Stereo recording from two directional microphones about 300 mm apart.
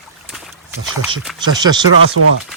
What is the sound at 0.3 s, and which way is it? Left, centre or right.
Boat, centre.